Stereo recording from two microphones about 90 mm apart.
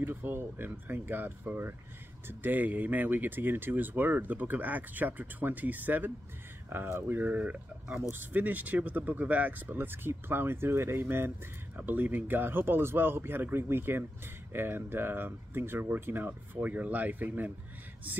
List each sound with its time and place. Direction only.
0.0 s speech: 25° right (ahead or behind)